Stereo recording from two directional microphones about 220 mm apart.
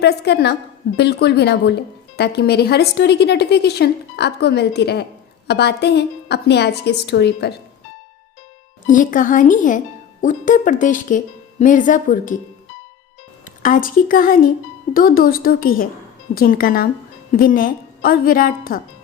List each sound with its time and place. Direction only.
0.0 s a woman's voice: 50° left (ahead or behind)
8.9 s speech: 35° left (ahead or behind)
13.6 s speech: 35° left (ahead or behind)